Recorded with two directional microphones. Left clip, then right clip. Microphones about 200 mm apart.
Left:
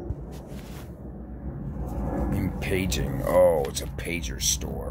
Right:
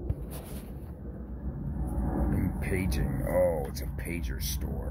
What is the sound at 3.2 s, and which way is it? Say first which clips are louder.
Speech: left 8 dB; 15° left (ahead or behind).